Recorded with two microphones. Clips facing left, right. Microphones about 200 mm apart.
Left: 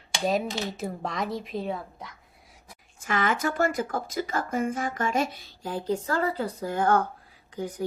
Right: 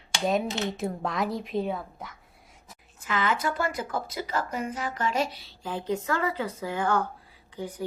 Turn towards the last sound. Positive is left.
turn(degrees=45)  # may be behind; listen again after turning